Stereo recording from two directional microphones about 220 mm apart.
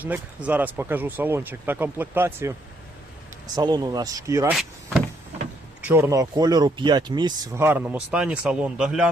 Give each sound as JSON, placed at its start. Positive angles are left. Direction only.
{"t": 0.0, "sound": "speech", "side_deg": -5}
{"t": 4.5, "sound": "power windows", "side_deg": 0}
{"t": 5.8, "sound": "speech", "side_deg": -10}